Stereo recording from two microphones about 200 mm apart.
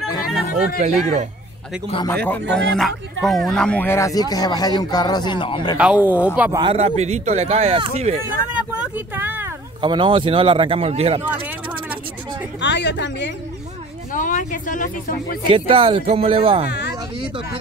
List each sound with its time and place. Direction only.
0.7 s speech: 35° right (ahead or behind)
2.2 s speech: 5° left (ahead or behind); by 5.8 s 25° left (ahead or behind)
5.8 s speech: 5° right (ahead or behind)
6.6 s speech: 30° right (ahead or behind)
8.5 s speech: 5° right (ahead or behind)
9.8 s speech: 25° right (ahead or behind)
12.5 s speech: 60° left (ahead or behind)
14.1 s speech: 40° left (ahead or behind)
15.5 s speech: 25° right (ahead or behind)